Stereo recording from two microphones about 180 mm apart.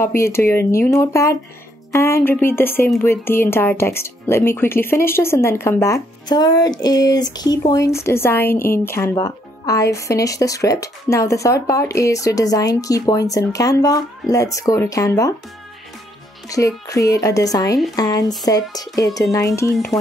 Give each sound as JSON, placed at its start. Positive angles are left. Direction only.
{"t": 0.0, "sound": "a woman's voice", "side_deg": 15}
{"t": 16.4, "sound": "a woman's voice", "side_deg": 20}